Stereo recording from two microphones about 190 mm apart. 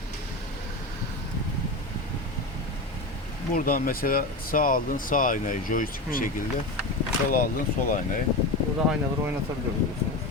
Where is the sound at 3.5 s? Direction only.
50° left (ahead or behind).